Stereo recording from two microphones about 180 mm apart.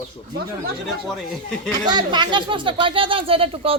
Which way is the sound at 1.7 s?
25° right (ahead or behind).